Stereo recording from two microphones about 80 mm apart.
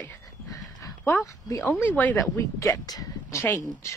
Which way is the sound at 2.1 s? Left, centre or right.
Left.